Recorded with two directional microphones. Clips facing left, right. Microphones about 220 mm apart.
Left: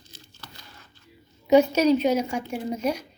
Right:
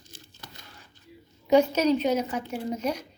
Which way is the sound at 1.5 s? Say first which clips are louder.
Left 3 dB; 10° left (ahead or behind).